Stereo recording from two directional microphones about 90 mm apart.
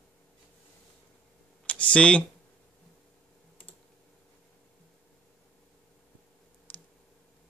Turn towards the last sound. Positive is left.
turn(degrees=15)  # may be behind; listen again after turning